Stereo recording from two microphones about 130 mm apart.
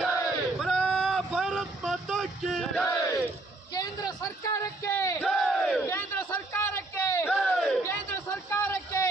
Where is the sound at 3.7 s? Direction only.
30° left (ahead or behind).